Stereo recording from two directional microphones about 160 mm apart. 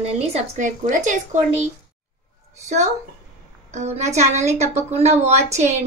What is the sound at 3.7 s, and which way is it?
A woman's voice, 45° right (ahead or behind).